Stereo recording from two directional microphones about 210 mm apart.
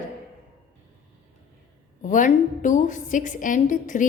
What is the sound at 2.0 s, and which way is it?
A woman's voice, 35° left (ahead or behind).